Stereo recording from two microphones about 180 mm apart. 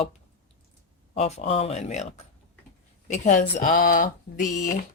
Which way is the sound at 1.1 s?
40° left (ahead or behind).